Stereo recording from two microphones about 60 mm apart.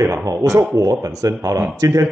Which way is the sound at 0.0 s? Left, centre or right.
Right.